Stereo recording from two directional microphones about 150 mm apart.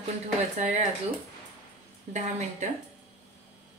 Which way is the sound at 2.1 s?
50° right (ahead or behind).